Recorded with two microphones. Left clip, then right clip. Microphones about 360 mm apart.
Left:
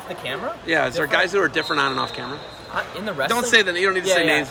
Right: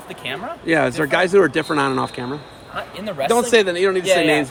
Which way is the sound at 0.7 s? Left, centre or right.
Centre.